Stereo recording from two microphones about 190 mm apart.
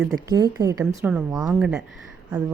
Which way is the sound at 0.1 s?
20° right (ahead or behind).